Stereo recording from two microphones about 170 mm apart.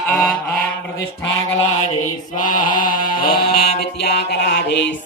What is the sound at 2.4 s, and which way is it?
Mantra, 55° left (ahead or behind).